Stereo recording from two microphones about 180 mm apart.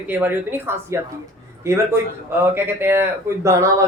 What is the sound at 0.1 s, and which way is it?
Speech, 10° right (ahead or behind).